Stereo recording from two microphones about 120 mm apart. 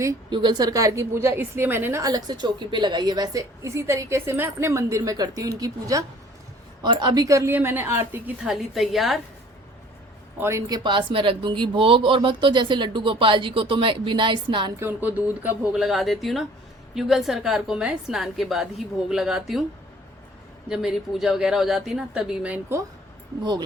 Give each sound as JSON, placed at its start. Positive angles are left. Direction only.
{"t": 0.3, "sound": "a woman's voice", "side_deg": -40}
{"t": 6.8, "sound": "a woman's voice", "side_deg": -40}
{"t": 8.4, "sound": "a woman's voice", "side_deg": 0}
{"t": 10.3, "sound": "a man's voice", "side_deg": -20}
{"t": 10.7, "sound": "speech", "side_deg": -35}
{"t": 14.8, "sound": "a woman's voice", "side_deg": -15}
{"t": 20.7, "sound": "a woman's voice", "side_deg": -5}
{"t": 23.4, "sound": "speech", "side_deg": -35}